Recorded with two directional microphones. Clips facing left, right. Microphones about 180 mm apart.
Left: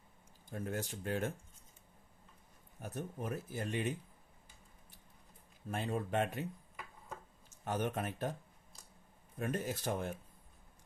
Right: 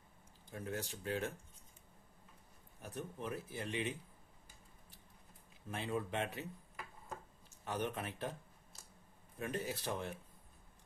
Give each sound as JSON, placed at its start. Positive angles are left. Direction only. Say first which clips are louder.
{"t": 0.5, "sound": "speech", "louder": "left 3 dB", "side_deg": 50}
{"t": 2.8, "sound": "speech", "louder": "left 3 dB", "side_deg": 45}
{"t": 5.7, "sound": "speech", "louder": "left 3 dB", "side_deg": 45}
{"t": 7.6, "sound": "speech", "louder": "left 3 dB", "side_deg": 45}
{"t": 9.4, "sound": "speech", "louder": "left 3 dB", "side_deg": 45}